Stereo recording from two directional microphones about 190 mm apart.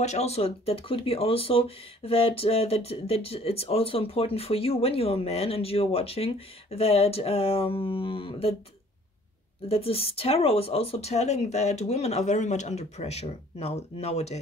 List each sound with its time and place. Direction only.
0.0 s speech: 35° left (ahead or behind)
9.7 s speech: 30° left (ahead or behind)